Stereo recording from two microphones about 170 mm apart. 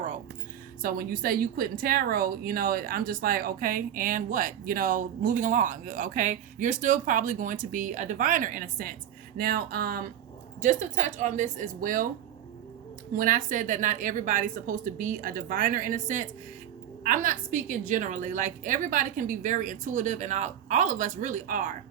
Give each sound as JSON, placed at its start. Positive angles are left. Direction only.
{"t": 0.8, "sound": "speech", "side_deg": -60}
{"t": 10.6, "sound": "speech", "side_deg": -45}
{"t": 13.1, "sound": "speech", "side_deg": -55}